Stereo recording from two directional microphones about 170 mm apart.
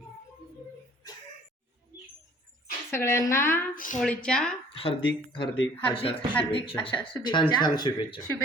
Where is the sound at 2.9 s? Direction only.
15° left (ahead or behind).